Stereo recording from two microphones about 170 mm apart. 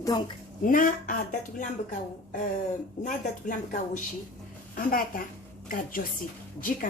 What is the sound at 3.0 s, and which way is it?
A woman's voice, 50° left (ahead or behind).